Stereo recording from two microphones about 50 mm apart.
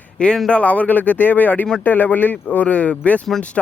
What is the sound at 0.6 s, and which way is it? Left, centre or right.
Speech, left.